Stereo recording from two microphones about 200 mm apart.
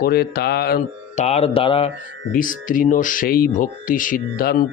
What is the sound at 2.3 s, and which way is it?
Speech, 45° left (ahead or behind).